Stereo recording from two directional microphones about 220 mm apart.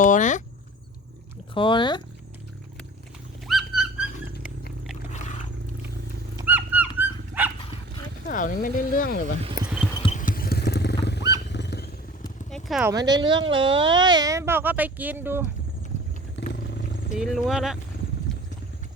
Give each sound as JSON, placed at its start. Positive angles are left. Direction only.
{"t": 0.0, "sound": "speech", "side_deg": 35}
{"t": 1.5, "sound": "speech", "side_deg": 20}
{"t": 3.4, "sound": "dog", "side_deg": 0}
{"t": 6.4, "sound": "dog", "side_deg": -10}
{"t": 8.3, "sound": "speech", "side_deg": 40}
{"t": 9.6, "sound": "clip-clop", "side_deg": -5}
{"t": 10.1, "sound": "vehicle", "side_deg": 35}
{"t": 11.4, "sound": "wild animals", "side_deg": 50}
{"t": 12.5, "sound": "horse", "side_deg": 0}
{"t": 12.9, "sound": "speech", "side_deg": -15}
{"t": 16.4, "sound": "vehicle", "side_deg": 55}
{"t": 17.2, "sound": "speech", "side_deg": 0}